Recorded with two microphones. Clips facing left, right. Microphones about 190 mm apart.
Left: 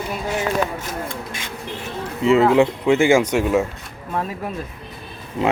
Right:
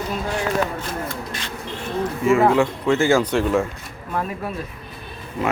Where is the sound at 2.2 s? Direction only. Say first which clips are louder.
Left 3 dB; 20° left (ahead or behind).